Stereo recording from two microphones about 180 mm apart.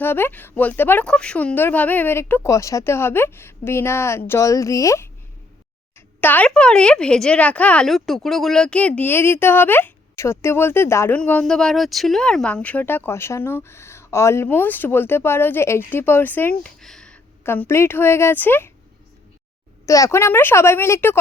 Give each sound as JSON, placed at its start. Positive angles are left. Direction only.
{"t": 0.0, "sound": "speech", "side_deg": 10}
{"t": 6.1, "sound": "speech", "side_deg": 10}
{"t": 19.8, "sound": "speech", "side_deg": 15}